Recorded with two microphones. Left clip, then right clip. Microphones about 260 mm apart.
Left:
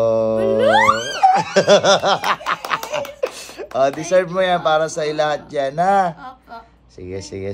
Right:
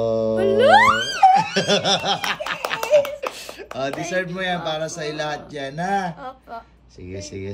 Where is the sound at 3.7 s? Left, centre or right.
Centre.